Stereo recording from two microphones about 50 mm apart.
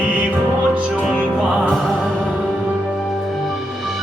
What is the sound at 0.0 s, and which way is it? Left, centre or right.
Music, right.